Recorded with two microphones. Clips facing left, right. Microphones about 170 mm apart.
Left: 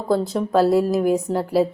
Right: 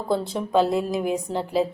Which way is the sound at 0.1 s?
5° left (ahead or behind).